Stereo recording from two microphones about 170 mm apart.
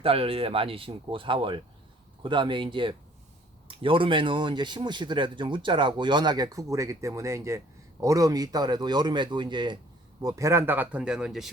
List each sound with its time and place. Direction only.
0.0 s a man's voice: 35° right (ahead or behind); by 11.4 s 5° right (ahead or behind)